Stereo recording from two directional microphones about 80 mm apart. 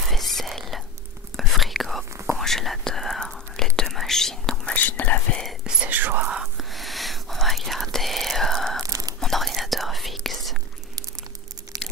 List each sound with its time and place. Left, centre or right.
0.1 s whispering: centre
5.4 s whispering: centre
5.9 s whispering: right
6.2 s whispering: centre
8.8 s whispering: right
9.2 s whispering: centre
11.7 s crushing: right